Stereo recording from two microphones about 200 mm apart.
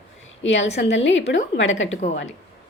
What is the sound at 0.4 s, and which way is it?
Speech, 65° left (ahead or behind).